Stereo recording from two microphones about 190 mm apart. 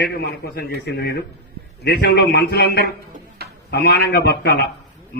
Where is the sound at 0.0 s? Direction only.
60° left (ahead or behind).